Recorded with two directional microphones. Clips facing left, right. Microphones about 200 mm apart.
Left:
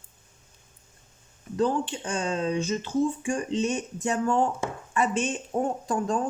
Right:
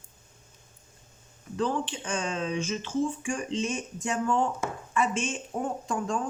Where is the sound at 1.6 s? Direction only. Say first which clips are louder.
Left 4 dB; 35° left (ahead or behind).